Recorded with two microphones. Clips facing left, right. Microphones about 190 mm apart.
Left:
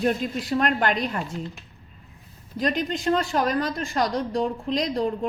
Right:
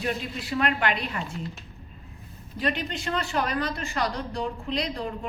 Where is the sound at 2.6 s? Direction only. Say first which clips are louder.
Left 4 dB; 40° left (ahead or behind).